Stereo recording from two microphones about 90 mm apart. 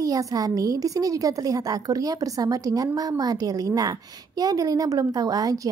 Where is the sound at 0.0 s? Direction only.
40° right (ahead or behind).